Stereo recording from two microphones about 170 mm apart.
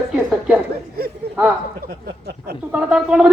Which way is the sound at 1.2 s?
65° right (ahead or behind).